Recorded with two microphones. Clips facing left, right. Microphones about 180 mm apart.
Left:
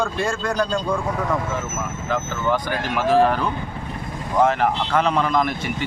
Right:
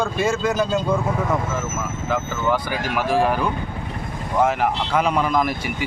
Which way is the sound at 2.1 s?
10° right (ahead or behind).